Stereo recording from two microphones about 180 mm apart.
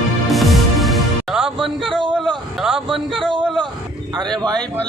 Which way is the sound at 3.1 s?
25° right (ahead or behind).